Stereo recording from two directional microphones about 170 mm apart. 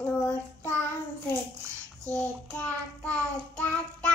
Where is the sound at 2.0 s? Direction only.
5° left (ahead or behind).